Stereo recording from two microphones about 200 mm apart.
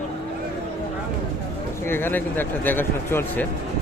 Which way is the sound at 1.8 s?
10° left (ahead or behind).